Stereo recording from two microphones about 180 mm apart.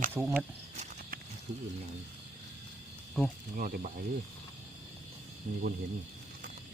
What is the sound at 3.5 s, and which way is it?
Speech, 50° right (ahead or behind).